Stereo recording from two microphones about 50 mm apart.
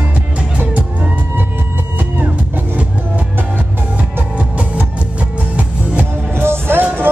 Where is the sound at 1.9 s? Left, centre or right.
Right.